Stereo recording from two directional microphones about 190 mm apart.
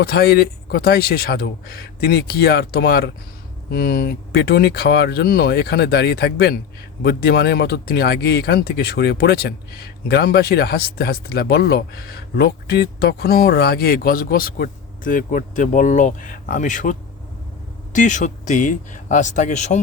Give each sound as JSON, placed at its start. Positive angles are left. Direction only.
{"t": 0.0, "sound": "speech", "side_deg": 55}